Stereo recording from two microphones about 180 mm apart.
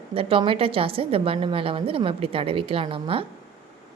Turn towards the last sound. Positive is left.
turn(degrees=-30)  # may be behind; listen again after turning